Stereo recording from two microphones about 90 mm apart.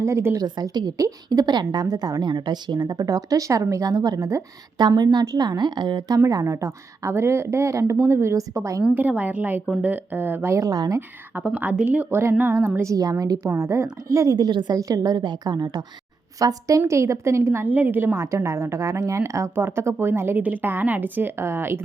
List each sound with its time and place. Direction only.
0.0 s speech: 30° right (ahead or behind)
0.3 s a woman's voice: 50° right (ahead or behind)
4.8 s a woman's voice: 55° right (ahead or behind)
6.4 s speech: 30° right (ahead or behind)
8.8 s a woman's voice: 15° right (ahead or behind); by 11.0 s 40° right (ahead or behind)
11.3 s a woman's voice: 15° right (ahead or behind); by 13.5 s 45° right (ahead or behind)
13.6 s speech: 30° right (ahead or behind)
14.3 s a woman's voice: 55° right (ahead or behind)
14.8 s a woman's voice: 40° right (ahead or behind)
16.4 s a woman's voice: 40° right (ahead or behind)